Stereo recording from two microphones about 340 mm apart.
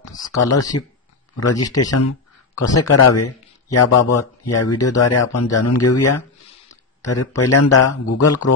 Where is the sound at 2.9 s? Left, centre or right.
Left.